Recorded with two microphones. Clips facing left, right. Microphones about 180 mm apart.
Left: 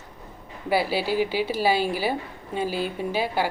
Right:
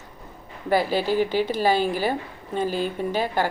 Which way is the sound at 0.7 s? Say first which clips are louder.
Right 2 dB; 10° left (ahead or behind).